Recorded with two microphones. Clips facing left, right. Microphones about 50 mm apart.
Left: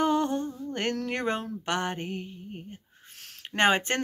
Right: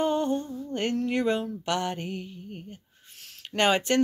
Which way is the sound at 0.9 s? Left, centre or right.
Left.